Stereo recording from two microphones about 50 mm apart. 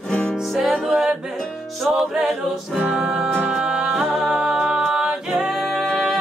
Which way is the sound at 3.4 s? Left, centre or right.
Centre.